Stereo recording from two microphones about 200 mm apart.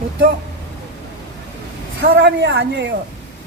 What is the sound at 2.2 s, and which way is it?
Speech, 60° right (ahead or behind).